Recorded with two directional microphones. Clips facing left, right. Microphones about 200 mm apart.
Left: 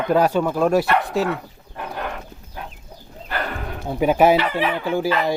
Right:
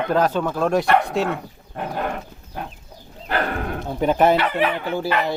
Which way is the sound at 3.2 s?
55° right (ahead or behind).